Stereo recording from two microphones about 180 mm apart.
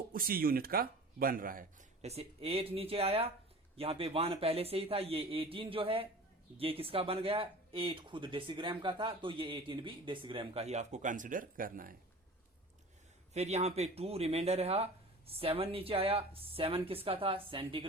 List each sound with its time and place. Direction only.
0.1 s speech: 55° right (ahead or behind)
2.0 s speech: 35° right (ahead or behind); by 11.9 s 50° right (ahead or behind)
13.3 s speech: 35° right (ahead or behind)